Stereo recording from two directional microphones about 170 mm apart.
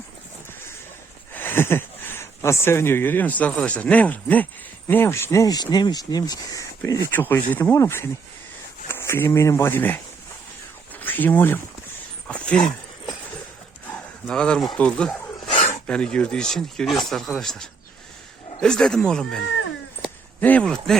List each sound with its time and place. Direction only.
1.3 s speech: 10° left (ahead or behind)
11.0 s speech: 10° left (ahead or behind)
14.3 s speech: 5° left (ahead or behind)
20.4 s speech: 10° left (ahead or behind)